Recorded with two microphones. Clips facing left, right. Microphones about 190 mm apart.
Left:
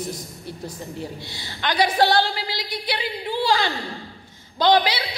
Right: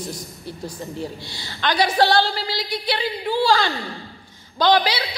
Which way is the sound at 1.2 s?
20° left (ahead or behind).